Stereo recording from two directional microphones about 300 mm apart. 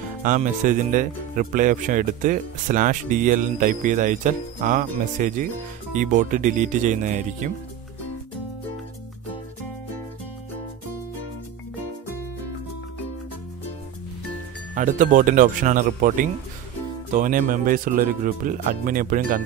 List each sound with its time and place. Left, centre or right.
0.2 s speech: right
14.8 s speech: right